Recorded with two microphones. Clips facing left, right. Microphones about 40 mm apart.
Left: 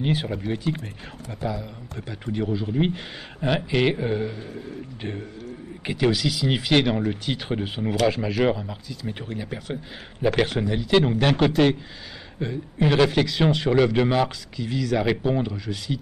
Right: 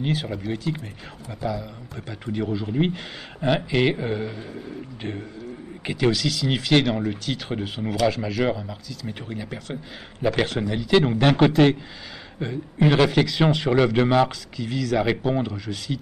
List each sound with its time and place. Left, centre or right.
0.0 s speech: centre
2.3 s a man's voice: centre
8.1 s a man's voice: centre
11.1 s a man's voice: centre